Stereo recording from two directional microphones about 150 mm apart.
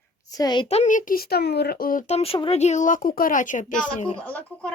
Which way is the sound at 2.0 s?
40° left (ahead or behind).